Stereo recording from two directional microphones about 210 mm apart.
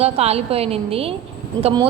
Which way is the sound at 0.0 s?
30° right (ahead or behind).